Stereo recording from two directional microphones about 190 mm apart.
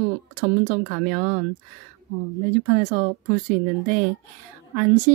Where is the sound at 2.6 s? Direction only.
40° right (ahead or behind).